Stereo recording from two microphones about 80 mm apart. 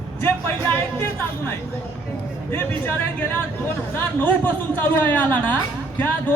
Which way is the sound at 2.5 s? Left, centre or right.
Left.